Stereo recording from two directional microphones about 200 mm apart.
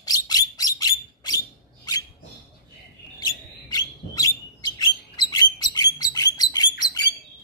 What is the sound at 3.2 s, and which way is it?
Bird, 20° left (ahead or behind).